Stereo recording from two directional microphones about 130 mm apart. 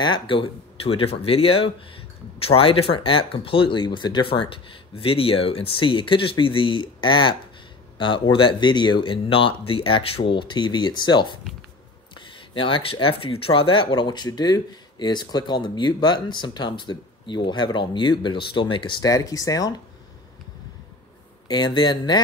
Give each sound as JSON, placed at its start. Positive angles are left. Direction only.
{"t": 0.0, "sound": "speech", "side_deg": 40}
{"t": 21.5, "sound": "speech", "side_deg": 35}